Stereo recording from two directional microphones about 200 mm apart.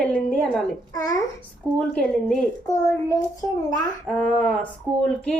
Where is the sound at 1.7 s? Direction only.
15° right (ahead or behind).